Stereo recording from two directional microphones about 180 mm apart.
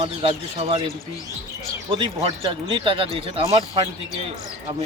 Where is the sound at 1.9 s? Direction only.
30° right (ahead or behind).